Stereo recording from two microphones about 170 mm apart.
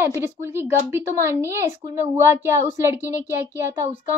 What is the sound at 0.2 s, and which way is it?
A woman's voice, 15° right (ahead or behind).